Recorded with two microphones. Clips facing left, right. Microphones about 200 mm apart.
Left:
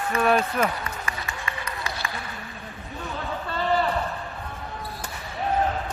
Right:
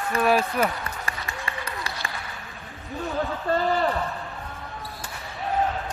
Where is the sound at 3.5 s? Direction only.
45° right (ahead or behind).